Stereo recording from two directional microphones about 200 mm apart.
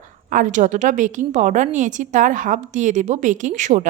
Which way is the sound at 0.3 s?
40° right (ahead or behind).